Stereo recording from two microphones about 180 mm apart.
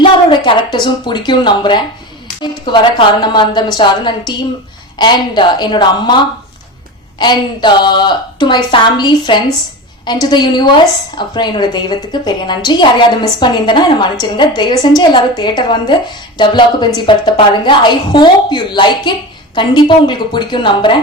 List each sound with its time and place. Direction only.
0.0 s a woman's voice: 30° left (ahead or behind)
7.2 s a woman's voice: 25° left (ahead or behind)